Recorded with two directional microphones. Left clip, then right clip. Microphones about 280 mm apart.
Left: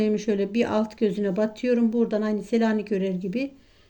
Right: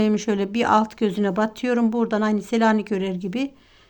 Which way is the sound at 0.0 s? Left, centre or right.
Right.